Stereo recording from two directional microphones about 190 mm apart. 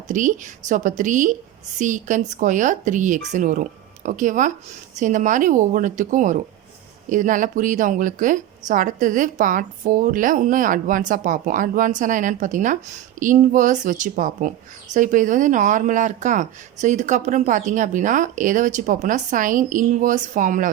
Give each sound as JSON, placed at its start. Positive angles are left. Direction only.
{"t": 0.1, "sound": "a woman's voice", "side_deg": -40}